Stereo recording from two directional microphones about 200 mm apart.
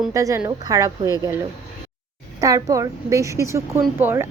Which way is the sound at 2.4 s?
15° right (ahead or behind).